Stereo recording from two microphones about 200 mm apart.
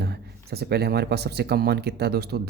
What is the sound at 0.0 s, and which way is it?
Speech, 55° right (ahead or behind).